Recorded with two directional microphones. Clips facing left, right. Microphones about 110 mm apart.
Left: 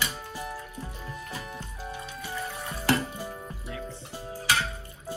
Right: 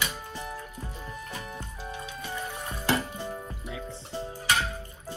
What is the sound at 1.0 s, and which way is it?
Music, centre (ahead or behind).